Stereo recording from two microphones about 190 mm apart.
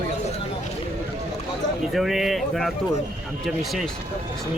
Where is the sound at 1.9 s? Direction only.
Centre (ahead or behind).